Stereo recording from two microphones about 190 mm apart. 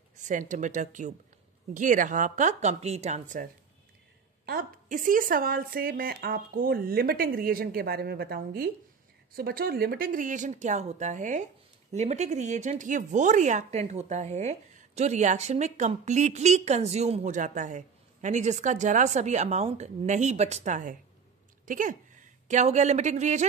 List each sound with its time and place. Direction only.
0.2 s speech: 40° right (ahead or behind)
4.5 s a woman's voice: 45° right (ahead or behind)